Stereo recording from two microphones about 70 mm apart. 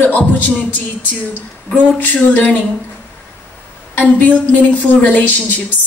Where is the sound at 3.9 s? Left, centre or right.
Left.